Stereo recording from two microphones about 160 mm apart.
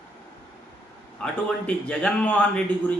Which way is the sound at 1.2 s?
5° left (ahead or behind).